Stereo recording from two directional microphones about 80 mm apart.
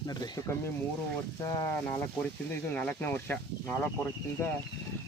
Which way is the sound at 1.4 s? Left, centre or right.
Left.